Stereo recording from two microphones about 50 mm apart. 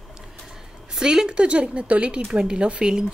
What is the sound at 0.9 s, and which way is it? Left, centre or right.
A woman's voice, centre.